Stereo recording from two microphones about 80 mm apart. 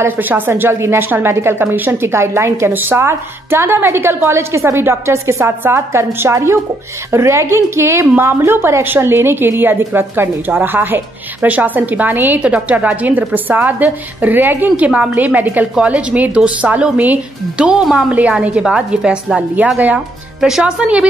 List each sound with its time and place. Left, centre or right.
0.0 s a woman's voice: right
20.3 s speech: centre